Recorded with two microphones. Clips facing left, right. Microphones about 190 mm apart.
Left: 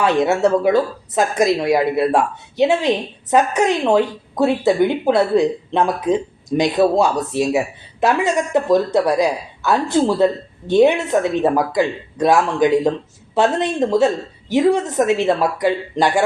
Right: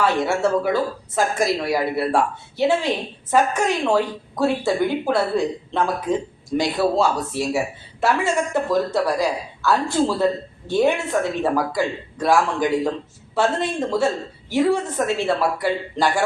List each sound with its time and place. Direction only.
0.0 s a woman's voice: 20° left (ahead or behind)